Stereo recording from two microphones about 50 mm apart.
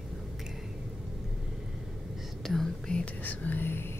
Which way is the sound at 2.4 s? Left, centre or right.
Centre.